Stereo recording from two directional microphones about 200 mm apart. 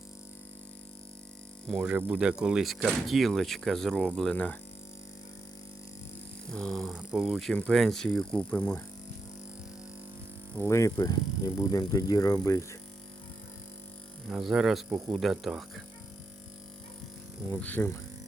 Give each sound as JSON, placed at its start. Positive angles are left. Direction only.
{"t": 1.6, "sound": "speech", "side_deg": 0}
{"t": 6.5, "sound": "speech", "side_deg": 0}
{"t": 10.6, "sound": "speech", "side_deg": 15}
{"t": 14.3, "sound": "speech", "side_deg": 0}
{"t": 17.5, "sound": "speech", "side_deg": 10}